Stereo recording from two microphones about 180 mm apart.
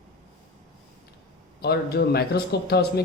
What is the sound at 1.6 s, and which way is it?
A man's voice, 65° left (ahead or behind).